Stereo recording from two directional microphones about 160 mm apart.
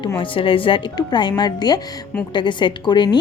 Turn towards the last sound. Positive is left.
turn(degrees=30)  # may be behind; listen again after turning